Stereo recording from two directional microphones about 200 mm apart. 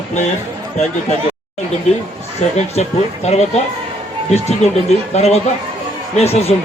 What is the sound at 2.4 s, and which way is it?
Speech, 35° left (ahead or behind).